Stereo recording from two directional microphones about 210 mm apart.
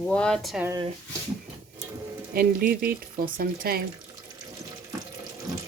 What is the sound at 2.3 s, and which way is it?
Speech, 45° right (ahead or behind).